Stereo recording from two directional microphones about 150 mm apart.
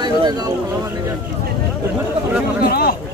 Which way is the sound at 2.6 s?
90° left.